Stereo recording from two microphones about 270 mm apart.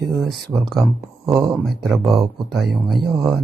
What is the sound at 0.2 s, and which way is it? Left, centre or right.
Speech, centre.